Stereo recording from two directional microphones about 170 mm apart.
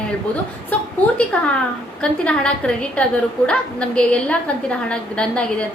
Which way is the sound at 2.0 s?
5° left (ahead or behind).